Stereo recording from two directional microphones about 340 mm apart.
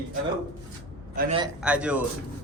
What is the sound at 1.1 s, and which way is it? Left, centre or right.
Speech, centre.